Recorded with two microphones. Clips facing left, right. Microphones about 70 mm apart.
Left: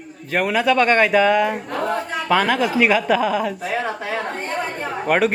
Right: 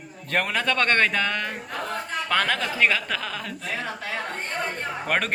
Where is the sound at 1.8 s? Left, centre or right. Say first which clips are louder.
Left 9 dB; centre.